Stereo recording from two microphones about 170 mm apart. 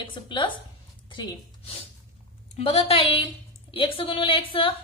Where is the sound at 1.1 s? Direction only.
30° left (ahead or behind).